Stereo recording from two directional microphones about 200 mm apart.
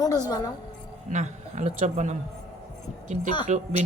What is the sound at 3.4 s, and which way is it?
Speech, 35° right (ahead or behind).